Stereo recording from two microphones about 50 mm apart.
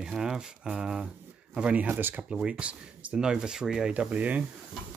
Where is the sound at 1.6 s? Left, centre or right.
Right.